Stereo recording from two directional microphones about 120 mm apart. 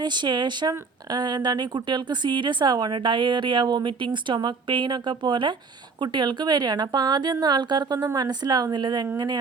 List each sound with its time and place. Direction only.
0.0 s speech: 40° right (ahead or behind)